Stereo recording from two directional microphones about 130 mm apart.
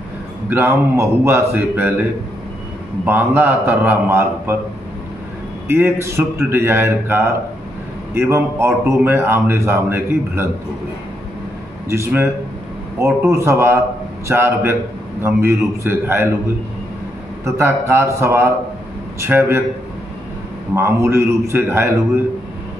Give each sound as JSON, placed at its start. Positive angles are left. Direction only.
{"t": 0.5, "sound": "a man's voice", "side_deg": -20}
{"t": 3.1, "sound": "a man's voice", "side_deg": -15}
{"t": 5.7, "sound": "a man's voice", "side_deg": -20}
{"t": 11.9, "sound": "a man's voice", "side_deg": -20}
{"t": 17.5, "sound": "a man's voice", "side_deg": -20}
{"t": 20.7, "sound": "a man's voice", "side_deg": -20}